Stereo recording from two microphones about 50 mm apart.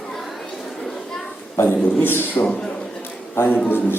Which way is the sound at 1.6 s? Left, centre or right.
Left.